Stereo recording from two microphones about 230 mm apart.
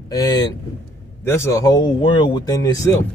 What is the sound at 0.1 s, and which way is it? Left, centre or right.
Speech, centre.